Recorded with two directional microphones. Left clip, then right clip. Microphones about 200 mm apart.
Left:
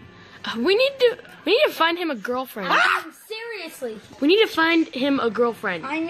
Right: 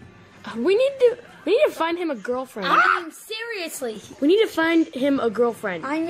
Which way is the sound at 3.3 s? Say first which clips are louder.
Right 3 dB; 50° right (ahead or behind).